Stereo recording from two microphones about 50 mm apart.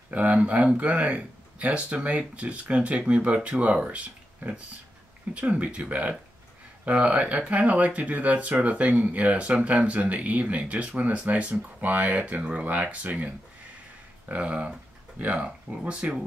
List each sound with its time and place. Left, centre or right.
0.1 s speech: right
14.3 s speech: right